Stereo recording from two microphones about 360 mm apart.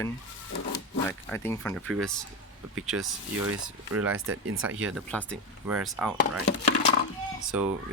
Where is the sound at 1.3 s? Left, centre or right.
Centre.